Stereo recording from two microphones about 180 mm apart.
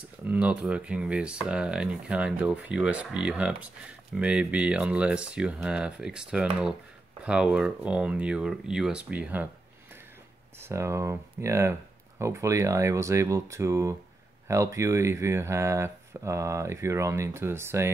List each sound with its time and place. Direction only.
0.3 s speech: 5° right (ahead or behind)
10.6 s speech: 15° right (ahead or behind)